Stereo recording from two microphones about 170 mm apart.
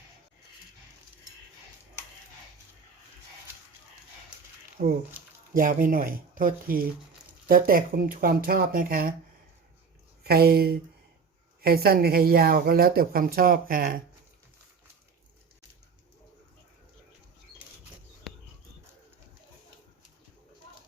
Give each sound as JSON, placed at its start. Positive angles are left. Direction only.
{"t": 4.8, "sound": "speech", "side_deg": -55}
{"t": 10.2, "sound": "speech", "side_deg": -65}